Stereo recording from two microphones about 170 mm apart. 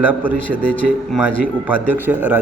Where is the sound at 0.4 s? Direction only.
10° left (ahead or behind).